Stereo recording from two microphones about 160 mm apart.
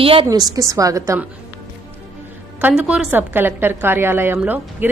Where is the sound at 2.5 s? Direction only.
10° right (ahead or behind).